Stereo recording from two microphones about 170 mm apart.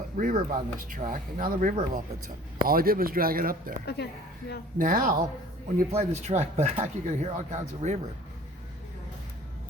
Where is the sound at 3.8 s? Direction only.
75° left (ahead or behind).